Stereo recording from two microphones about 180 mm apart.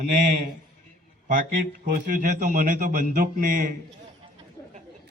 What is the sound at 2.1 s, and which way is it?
A man's voice, 45° right (ahead or behind).